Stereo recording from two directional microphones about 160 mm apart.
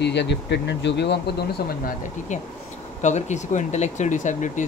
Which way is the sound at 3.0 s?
45° left (ahead or behind).